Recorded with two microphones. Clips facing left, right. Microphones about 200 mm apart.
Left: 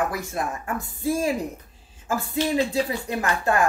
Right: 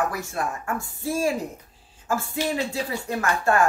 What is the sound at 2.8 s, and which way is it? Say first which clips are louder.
Speech: even; 20° left (ahead or behind).